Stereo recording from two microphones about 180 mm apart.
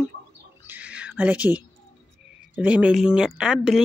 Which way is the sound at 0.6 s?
10° right (ahead or behind).